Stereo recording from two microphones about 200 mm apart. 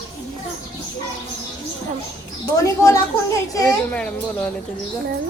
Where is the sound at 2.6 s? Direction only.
15° left (ahead or behind).